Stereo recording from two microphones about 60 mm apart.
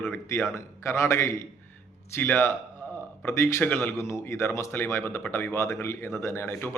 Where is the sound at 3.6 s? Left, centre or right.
Left.